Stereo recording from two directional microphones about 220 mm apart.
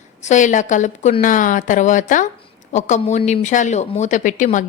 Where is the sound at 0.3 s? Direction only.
35° left (ahead or behind).